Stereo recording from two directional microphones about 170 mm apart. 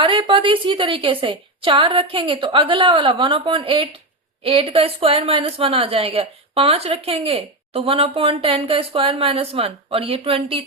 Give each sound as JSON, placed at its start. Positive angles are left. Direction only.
{"t": 0.0, "sound": "a woman's voice", "side_deg": -30}